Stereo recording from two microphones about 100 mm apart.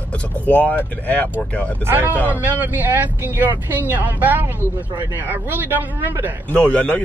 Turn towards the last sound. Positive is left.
turn(degrees=15)  # may be behind; listen again after turning